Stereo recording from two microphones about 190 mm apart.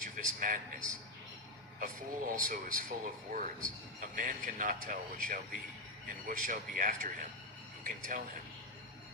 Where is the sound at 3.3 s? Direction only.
50° right (ahead or behind).